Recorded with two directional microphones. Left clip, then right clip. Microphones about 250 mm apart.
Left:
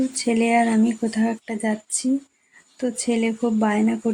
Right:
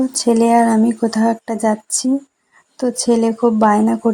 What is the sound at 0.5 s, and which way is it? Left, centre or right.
Speech, centre.